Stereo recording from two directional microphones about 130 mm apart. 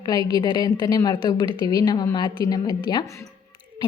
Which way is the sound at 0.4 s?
35° left (ahead or behind).